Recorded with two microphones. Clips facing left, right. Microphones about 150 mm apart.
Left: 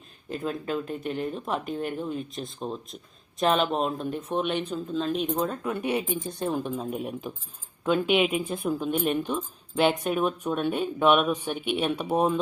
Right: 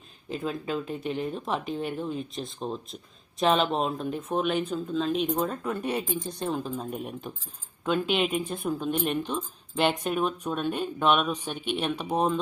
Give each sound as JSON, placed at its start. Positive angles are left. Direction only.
{"t": 0.3, "sound": "speech", "side_deg": 0}